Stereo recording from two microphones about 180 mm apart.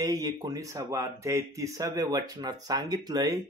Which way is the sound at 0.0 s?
20° right (ahead or behind).